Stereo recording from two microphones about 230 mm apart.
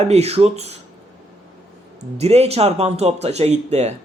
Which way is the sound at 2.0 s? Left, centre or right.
Right.